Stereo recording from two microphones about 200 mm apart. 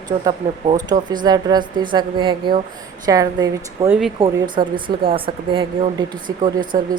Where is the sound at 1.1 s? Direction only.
20° right (ahead or behind).